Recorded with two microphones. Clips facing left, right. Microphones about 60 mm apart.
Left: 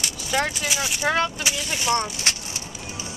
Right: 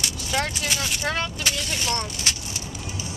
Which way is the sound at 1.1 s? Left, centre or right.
Centre.